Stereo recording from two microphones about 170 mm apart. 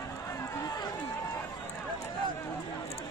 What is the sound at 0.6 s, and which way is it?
Run, 20° left (ahead or behind).